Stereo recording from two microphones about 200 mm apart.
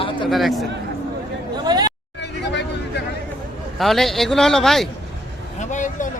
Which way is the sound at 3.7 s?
Centre (ahead or behind).